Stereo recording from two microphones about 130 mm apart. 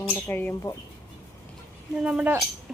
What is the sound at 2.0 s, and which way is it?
Speech, 10° right (ahead or behind).